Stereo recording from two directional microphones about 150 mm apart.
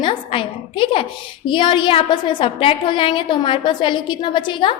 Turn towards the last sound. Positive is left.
turn(degrees=35)  # may be behind; listen again after turning